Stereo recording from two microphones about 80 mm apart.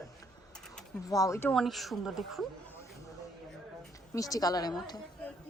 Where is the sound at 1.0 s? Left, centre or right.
Left.